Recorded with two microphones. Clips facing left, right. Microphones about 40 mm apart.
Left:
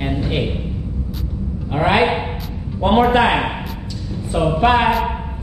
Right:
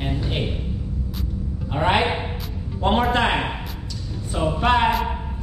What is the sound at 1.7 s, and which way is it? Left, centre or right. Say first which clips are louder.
A woman's voice: left 4 dB; centre.